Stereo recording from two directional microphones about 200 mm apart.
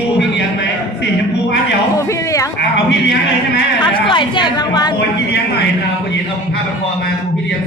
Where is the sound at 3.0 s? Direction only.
60° left (ahead or behind).